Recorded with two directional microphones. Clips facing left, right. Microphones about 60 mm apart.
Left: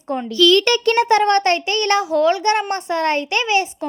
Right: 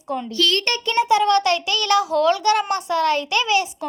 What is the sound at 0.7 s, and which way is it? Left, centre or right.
Speech, left.